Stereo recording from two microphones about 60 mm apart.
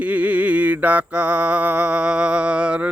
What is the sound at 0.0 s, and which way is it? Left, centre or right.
Mantra, right.